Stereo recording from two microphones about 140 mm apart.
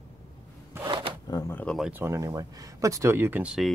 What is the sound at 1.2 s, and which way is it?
Speech, 30° left (ahead or behind).